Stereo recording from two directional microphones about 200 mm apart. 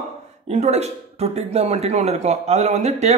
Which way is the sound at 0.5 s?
35° right (ahead or behind).